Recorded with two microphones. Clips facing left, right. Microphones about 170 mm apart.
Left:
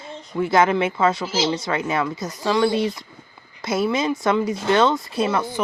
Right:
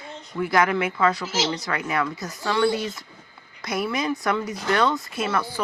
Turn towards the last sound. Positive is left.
turn(degrees=20)  # may be behind; listen again after turning